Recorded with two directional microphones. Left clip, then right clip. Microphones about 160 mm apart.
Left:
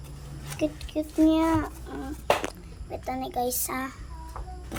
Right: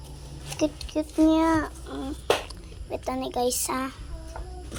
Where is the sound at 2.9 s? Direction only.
10° right (ahead or behind).